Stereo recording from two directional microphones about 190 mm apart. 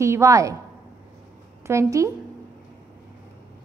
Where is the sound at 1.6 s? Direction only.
15° right (ahead or behind).